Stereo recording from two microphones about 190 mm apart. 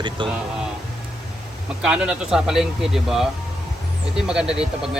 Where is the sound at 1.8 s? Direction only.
5° right (ahead or behind).